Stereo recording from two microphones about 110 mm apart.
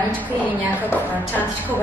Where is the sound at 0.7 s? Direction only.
15° left (ahead or behind).